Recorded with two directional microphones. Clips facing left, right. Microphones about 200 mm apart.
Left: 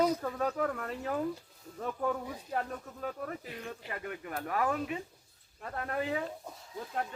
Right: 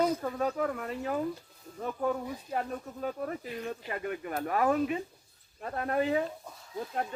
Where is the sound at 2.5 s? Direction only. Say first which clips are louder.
Right 2 dB; 20° right (ahead or behind).